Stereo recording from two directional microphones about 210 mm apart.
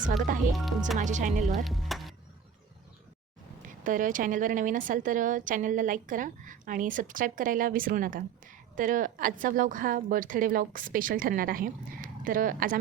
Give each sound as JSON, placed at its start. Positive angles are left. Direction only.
{"t": 0.0, "sound": "a woman's voice", "side_deg": -40}
{"t": 1.5, "sound": "speech", "side_deg": 0}
{"t": 3.8, "sound": "a woman's voice", "side_deg": -40}